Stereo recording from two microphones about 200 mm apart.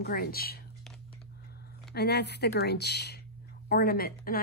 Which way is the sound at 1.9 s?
55° left (ahead or behind).